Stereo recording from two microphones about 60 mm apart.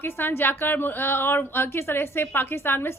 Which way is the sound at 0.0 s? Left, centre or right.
Left.